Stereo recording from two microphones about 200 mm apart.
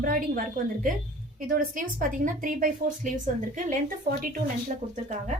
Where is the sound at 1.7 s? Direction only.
45° right (ahead or behind).